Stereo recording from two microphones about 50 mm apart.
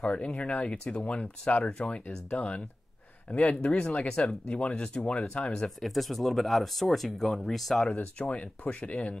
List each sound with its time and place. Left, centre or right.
0.0 s speech: left
5.8 s speech: centre
8.0 s speech: left